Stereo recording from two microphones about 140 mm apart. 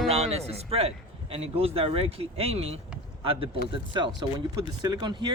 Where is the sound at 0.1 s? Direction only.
50° right (ahead or behind).